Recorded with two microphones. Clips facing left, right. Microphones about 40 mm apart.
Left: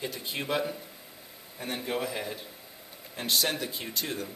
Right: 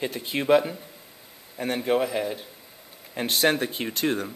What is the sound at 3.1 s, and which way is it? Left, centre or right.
A man's voice, right.